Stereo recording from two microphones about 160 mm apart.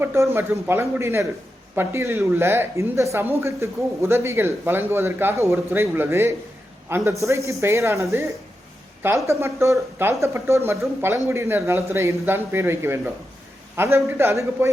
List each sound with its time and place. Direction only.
0.0 s speech: 15° right (ahead or behind)